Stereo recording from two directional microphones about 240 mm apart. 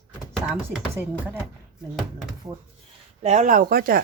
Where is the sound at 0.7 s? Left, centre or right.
Centre.